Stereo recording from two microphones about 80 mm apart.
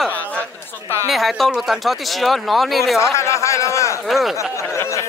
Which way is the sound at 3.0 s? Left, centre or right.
Left.